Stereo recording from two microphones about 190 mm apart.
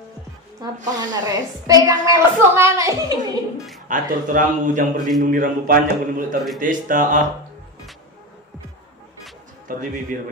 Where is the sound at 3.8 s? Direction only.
45° right (ahead or behind).